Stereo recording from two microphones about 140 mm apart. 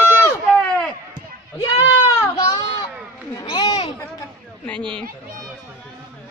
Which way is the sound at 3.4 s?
35° left (ahead or behind).